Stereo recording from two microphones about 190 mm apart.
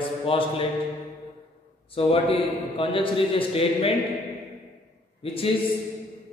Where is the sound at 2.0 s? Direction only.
30° left (ahead or behind).